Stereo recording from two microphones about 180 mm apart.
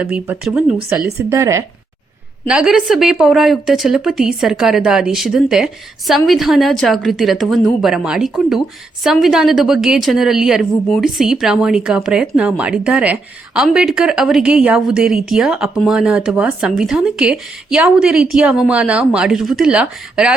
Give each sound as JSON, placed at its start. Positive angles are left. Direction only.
{"t": 0.0, "sound": "a woman's voice", "side_deg": -5}
{"t": 1.3, "sound": "speech", "side_deg": -15}
{"t": 2.5, "sound": "a woman's voice", "side_deg": -5}